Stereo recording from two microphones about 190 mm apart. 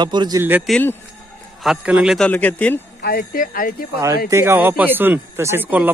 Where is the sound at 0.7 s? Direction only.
10° left (ahead or behind).